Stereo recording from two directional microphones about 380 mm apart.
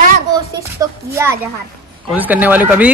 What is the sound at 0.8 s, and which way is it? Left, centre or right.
Speech, centre.